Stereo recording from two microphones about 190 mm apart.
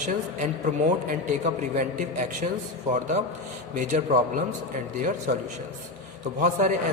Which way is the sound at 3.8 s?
40° right (ahead or behind).